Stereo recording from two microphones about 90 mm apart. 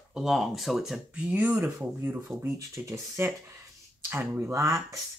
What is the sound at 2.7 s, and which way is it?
Speech, 35° right (ahead or behind).